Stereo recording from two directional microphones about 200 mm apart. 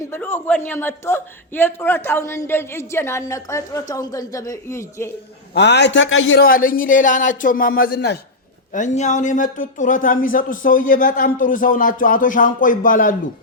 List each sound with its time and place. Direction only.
0.1 s a man's voice: 10° left (ahead or behind)
5.5 s a man's voice: 60° left (ahead or behind); by 6.4 s 75° left (ahead or behind)
6.4 s speech: 45° left (ahead or behind)
8.7 s speech: 35° left (ahead or behind)